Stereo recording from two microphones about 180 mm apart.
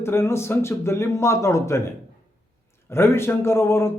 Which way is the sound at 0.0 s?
15° left (ahead or behind).